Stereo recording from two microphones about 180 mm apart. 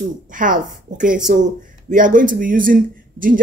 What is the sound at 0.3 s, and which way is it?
Speech, 45° right (ahead or behind).